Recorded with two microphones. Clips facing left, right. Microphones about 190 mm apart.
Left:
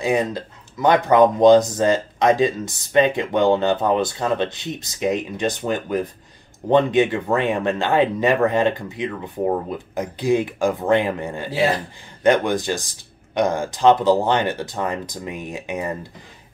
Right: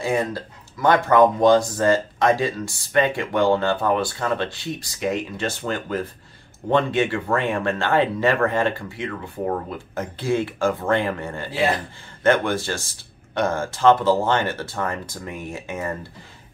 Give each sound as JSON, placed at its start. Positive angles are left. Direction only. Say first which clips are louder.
{"t": 0.0, "sound": "speech", "louder": "left 2 dB", "side_deg": 20}